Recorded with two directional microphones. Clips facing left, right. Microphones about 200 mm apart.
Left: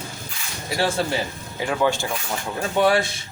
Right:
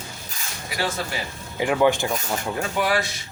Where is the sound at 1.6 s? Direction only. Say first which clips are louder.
Right 3 dB; 15° right (ahead or behind).